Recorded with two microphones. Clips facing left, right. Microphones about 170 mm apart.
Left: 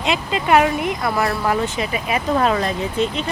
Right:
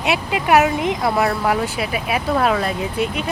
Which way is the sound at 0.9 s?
20° right (ahead or behind).